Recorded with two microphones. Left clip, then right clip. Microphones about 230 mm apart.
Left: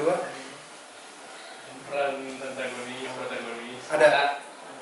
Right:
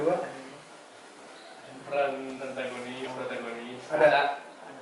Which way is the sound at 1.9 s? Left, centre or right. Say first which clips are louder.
Even; centre.